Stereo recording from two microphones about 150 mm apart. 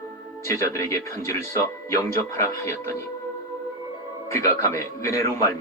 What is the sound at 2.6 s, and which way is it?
Speech, 20° left (ahead or behind).